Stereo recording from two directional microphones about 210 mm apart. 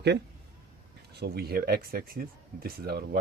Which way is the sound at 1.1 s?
50° right (ahead or behind).